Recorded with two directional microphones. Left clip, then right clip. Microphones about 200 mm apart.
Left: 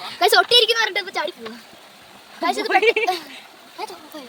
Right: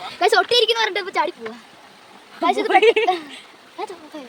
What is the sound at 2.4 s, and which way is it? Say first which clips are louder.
A woman's voice: right 3 dB; 10° right (ahead or behind).